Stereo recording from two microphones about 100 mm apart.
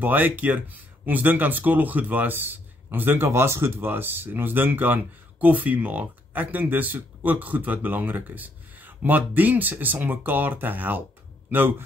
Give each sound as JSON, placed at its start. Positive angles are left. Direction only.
{"t": 0.0, "sound": "speech", "side_deg": -20}